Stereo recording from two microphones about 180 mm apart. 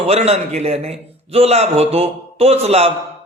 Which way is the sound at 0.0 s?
35° right (ahead or behind).